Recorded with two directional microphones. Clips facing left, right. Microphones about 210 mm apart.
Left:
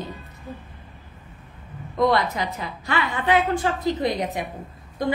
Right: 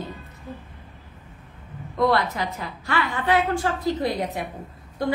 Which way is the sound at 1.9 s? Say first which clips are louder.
Left 1 dB; 20° left (ahead or behind).